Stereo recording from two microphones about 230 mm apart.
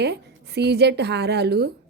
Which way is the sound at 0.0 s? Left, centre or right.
Right.